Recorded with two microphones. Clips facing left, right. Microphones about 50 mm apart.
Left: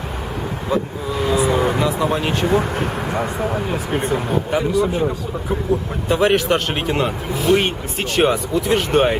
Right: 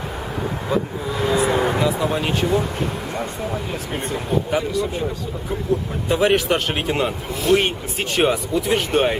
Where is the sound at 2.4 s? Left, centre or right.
Left.